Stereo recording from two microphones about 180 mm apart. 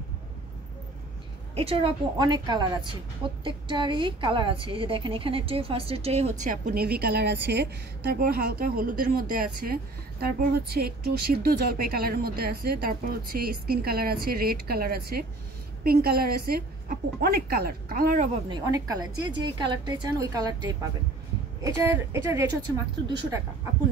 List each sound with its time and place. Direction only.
1.5 s a woman's voice: 30° right (ahead or behind); by 7.6 s 65° right (ahead or behind)
8.1 s a woman's voice: 55° right (ahead or behind)
18.5 s a woman's voice: 20° right (ahead or behind)